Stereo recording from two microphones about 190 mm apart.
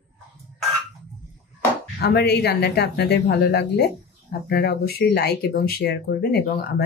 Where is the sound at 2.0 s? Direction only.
60° left (ahead or behind).